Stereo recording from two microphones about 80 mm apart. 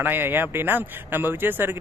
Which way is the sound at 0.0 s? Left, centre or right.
Right.